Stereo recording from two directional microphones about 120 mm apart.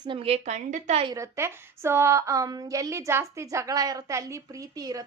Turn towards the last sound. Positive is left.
turn(degrees=-30)  # may be behind; listen again after turning